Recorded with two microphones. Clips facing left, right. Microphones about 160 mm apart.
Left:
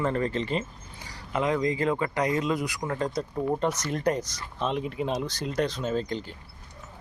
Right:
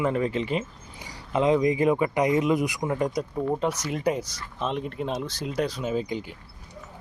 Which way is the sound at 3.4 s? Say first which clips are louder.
Even; centre (ahead or behind).